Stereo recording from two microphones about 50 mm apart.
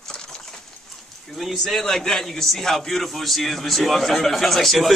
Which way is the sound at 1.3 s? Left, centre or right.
Centre.